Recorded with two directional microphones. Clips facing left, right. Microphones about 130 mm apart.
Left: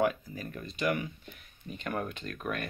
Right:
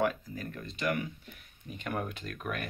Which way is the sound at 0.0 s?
10° left (ahead or behind).